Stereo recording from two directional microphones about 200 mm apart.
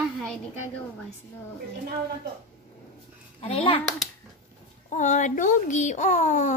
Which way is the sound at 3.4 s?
30° left (ahead or behind).